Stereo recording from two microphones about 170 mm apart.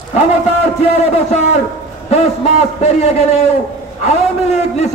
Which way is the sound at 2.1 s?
40° left (ahead or behind).